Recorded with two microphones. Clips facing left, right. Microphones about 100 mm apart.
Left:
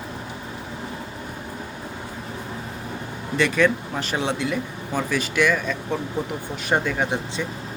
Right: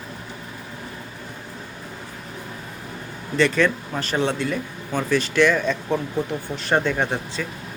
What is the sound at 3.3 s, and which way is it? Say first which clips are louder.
Speech: even; 10° left (ahead or behind).